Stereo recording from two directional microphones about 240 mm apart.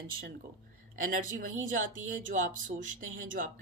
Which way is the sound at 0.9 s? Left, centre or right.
Right.